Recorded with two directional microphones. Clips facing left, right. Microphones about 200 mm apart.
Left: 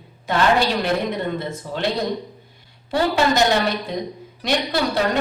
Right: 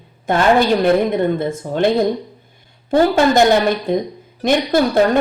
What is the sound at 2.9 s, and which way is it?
Speech, 50° right (ahead or behind).